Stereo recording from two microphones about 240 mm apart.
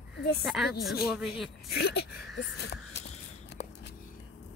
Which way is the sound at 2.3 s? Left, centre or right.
Left.